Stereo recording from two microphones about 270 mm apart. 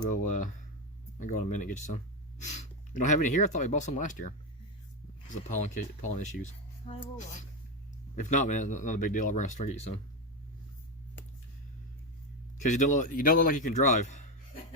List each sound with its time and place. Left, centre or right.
0.1 s speech: left
12.5 s speech: left